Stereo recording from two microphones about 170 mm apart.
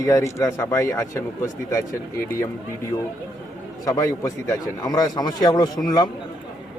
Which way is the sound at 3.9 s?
20° left (ahead or behind).